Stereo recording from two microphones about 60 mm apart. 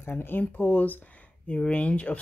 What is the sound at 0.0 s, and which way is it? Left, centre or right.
Speech, left.